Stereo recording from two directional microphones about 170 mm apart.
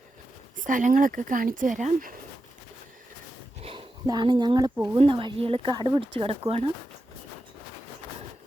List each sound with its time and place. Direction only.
0.5 s speech: 50° right (ahead or behind)
3.6 s a sound: 35° right (ahead or behind)
4.0 s speech: 25° right (ahead or behind)